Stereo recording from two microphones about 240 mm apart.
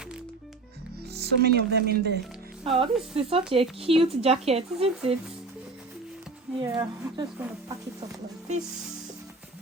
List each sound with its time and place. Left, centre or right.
1.1 s speech: right
2.6 s speech: right
6.7 s speech: centre